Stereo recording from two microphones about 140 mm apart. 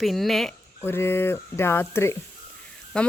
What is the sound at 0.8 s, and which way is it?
Speech, 15° left (ahead or behind).